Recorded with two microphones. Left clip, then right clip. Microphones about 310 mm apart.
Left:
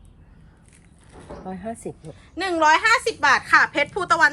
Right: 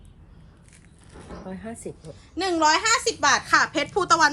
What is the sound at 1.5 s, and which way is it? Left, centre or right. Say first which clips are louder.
Speech: left 5 dB; centre.